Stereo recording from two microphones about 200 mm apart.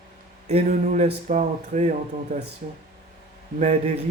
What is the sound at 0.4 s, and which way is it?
Speech, 35° right (ahead or behind).